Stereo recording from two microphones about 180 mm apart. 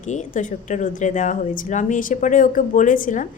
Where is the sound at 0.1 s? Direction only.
40° left (ahead or behind).